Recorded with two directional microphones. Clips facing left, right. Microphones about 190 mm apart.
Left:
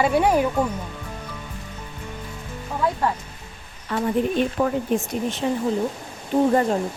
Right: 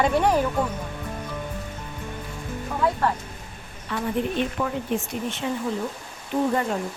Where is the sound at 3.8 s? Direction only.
40° left (ahead or behind).